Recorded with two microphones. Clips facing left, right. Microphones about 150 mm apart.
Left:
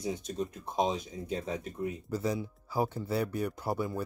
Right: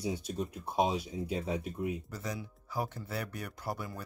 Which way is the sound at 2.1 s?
30° left (ahead or behind).